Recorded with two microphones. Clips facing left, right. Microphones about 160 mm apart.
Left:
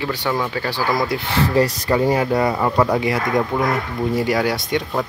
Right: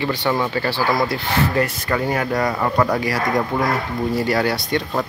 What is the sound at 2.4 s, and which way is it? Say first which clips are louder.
Speech: left 1 dB; 10° left (ahead or behind).